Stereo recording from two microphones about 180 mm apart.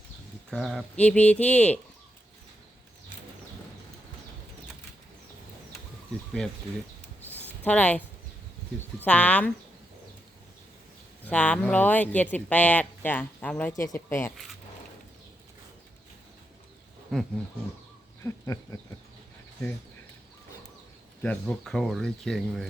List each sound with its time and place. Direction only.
0.5 s speech: centre (ahead or behind)
7.6 s speech: 5° left (ahead or behind)
11.3 s speech: 5° left (ahead or behind)
17.1 s speech: centre (ahead or behind)
18.2 s speech: 15° left (ahead or behind)
21.2 s speech: 5° left (ahead or behind)